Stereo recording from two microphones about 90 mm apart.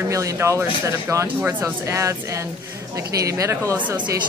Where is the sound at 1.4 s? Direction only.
20° right (ahead or behind).